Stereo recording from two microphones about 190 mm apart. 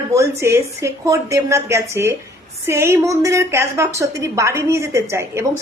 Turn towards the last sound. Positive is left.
turn(degrees=-15)  # may be behind; listen again after turning